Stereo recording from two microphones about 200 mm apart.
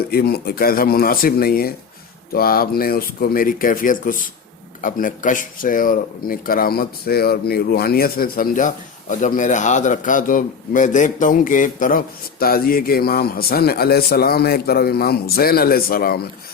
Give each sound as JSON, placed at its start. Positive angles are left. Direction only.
{"t": 0.1, "sound": "speech", "side_deg": 50}